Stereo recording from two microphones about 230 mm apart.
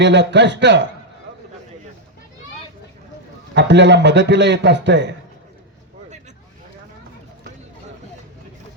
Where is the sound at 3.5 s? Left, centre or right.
Right.